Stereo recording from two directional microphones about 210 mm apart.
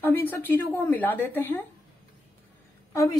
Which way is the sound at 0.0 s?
10° left (ahead or behind).